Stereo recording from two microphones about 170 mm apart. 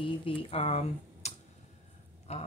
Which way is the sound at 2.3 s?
40° left (ahead or behind).